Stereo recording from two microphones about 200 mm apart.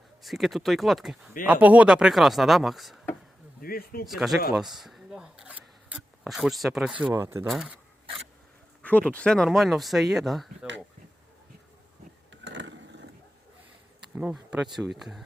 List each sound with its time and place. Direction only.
0.2 s speech: centre (ahead or behind)
3.6 s speech: 50° left (ahead or behind)
4.0 s speech: centre (ahead or behind)
8.8 s speech: 5° left (ahead or behind)
12.3 s a sound: 60° right (ahead or behind)
14.2 s speech: 5° right (ahead or behind)